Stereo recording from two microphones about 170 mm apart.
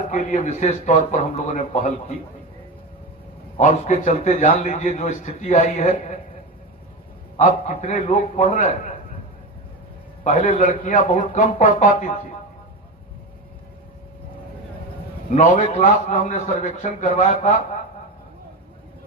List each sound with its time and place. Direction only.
0.1 s a man's voice: 45° left (ahead or behind)
3.6 s a man's voice: 45° left (ahead or behind)
7.3 s a man's voice: 45° left (ahead or behind)
10.2 s a man's voice: 50° left (ahead or behind)
15.3 s a man's voice: 50° left (ahead or behind)